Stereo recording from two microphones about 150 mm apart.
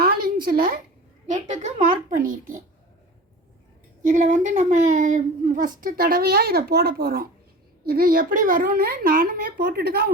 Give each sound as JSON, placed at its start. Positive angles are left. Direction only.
{"t": 0.0, "sound": "a sound", "side_deg": -90}
{"t": 1.3, "sound": "a child's voice", "side_deg": -50}
{"t": 4.1, "sound": "speech", "side_deg": -60}
{"t": 7.9, "sound": "speech", "side_deg": -75}